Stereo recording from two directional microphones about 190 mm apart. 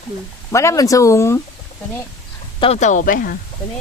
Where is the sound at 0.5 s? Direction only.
15° left (ahead or behind).